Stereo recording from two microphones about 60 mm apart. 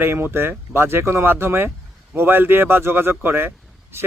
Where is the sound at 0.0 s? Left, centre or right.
Right.